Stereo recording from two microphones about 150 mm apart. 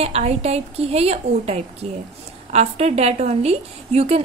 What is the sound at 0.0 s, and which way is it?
A woman's voice, 45° right (ahead or behind).